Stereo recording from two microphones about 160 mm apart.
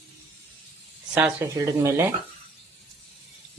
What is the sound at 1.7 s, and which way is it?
Speech, 15° right (ahead or behind).